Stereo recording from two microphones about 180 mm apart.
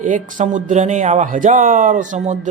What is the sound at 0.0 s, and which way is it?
Speech, 45° right (ahead or behind).